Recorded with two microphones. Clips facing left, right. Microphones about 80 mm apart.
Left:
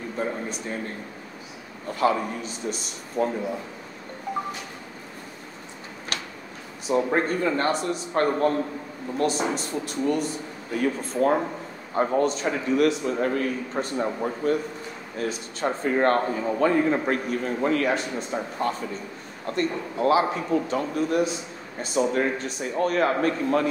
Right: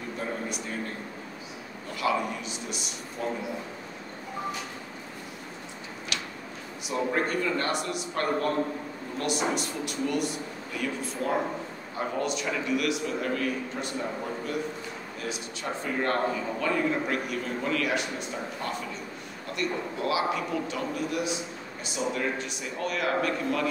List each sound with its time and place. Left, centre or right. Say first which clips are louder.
2.0 s a man's voice: left 4 dB; left
6.9 s a man's voice: left 5 dB; left